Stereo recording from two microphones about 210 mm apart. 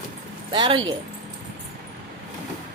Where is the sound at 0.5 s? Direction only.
20° right (ahead or behind).